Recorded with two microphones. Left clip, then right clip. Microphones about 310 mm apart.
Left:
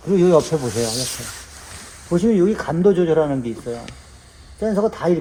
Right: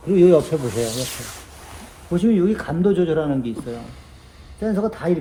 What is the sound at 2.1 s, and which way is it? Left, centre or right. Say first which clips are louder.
Speech: left 2 dB; centre.